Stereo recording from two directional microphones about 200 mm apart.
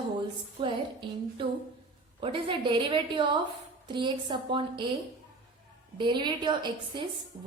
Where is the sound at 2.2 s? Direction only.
25° right (ahead or behind).